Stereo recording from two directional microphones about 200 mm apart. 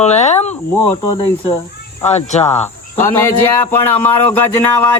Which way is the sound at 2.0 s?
35° left (ahead or behind).